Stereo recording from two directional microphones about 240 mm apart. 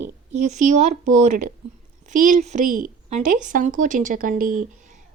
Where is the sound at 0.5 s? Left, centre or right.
Right.